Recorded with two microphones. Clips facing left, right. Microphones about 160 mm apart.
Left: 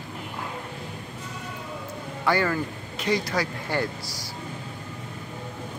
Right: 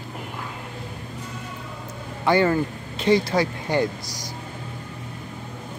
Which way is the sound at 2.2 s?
20° right (ahead or behind).